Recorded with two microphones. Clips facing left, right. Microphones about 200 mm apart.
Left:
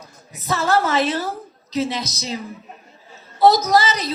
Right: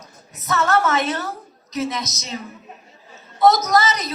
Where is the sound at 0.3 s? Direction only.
30° left (ahead or behind).